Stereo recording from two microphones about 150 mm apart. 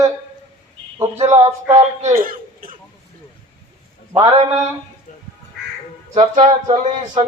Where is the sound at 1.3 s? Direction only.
20° right (ahead or behind).